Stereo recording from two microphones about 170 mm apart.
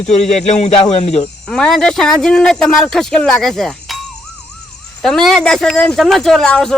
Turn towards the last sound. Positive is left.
turn(degrees=5)  # may be behind; listen again after turning